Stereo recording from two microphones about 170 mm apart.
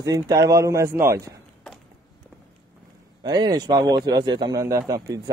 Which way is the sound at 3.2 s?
25° right (ahead or behind).